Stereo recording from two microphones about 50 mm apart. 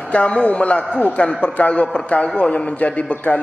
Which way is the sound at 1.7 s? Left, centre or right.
Centre.